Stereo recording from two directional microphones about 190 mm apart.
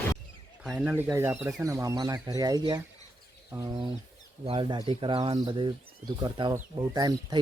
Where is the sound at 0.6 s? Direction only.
5° right (ahead or behind).